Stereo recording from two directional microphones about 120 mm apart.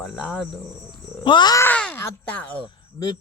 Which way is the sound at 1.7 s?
15° left (ahead or behind).